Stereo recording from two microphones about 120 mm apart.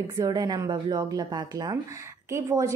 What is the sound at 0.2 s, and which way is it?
A woman's voice, 30° right (ahead or behind).